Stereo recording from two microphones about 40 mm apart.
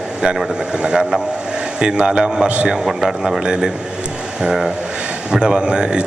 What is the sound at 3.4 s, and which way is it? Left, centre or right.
Speech, right.